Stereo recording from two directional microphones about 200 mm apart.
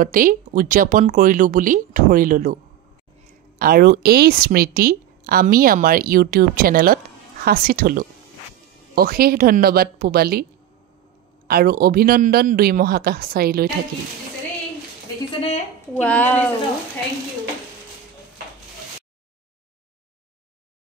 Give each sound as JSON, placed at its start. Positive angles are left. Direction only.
{"t": 0.0, "sound": "a woman's voice", "side_deg": -45}
{"t": 11.4, "sound": "a woman's voice", "side_deg": -50}
{"t": 15.4, "sound": "a sound", "side_deg": 35}
{"t": 16.0, "sound": "speech", "side_deg": 5}